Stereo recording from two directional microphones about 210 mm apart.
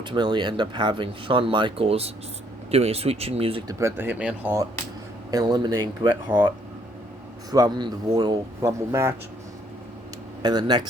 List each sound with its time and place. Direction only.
0.0 s speech: 20° right (ahead or behind)
3.8 s speech: 10° right (ahead or behind)
5.3 s speech: 20° right (ahead or behind)
7.5 s speech: 20° right (ahead or behind)
10.4 s speech: 20° right (ahead or behind)